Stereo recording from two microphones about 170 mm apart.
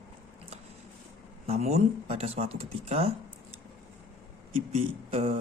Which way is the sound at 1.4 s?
40° right (ahead or behind).